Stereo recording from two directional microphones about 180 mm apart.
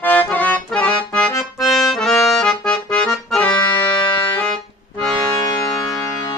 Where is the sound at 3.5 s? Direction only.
25° left (ahead or behind).